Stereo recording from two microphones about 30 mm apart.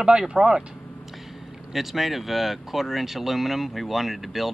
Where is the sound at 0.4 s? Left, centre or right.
Right.